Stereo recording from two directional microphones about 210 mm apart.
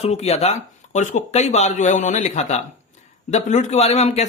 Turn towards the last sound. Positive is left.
turn(degrees=30)  # may be behind; listen again after turning